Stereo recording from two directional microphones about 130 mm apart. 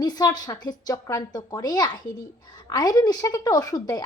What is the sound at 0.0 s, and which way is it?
A woman's voice, 30° left (ahead or behind).